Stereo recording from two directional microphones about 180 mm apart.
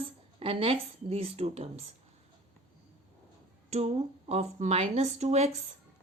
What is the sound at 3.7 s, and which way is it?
Speech, 35° right (ahead or behind).